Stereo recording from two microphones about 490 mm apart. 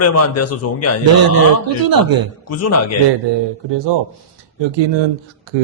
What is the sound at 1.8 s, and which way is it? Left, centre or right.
Speech, right.